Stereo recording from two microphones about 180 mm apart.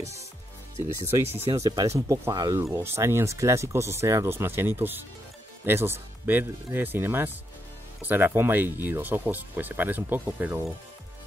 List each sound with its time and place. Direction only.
0.7 s speech: 15° right (ahead or behind)